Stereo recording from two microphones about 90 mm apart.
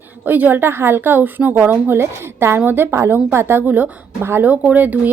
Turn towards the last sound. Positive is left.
turn(degrees=-20)  # may be behind; listen again after turning